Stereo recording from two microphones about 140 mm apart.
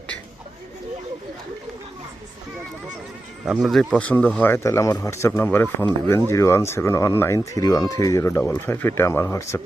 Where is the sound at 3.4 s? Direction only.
5° right (ahead or behind).